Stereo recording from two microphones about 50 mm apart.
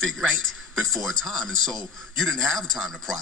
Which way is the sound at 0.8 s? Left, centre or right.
Centre.